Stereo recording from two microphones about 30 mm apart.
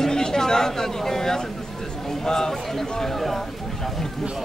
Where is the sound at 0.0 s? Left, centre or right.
Left.